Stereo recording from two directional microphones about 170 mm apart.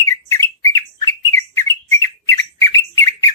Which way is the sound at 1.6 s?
15° left (ahead or behind).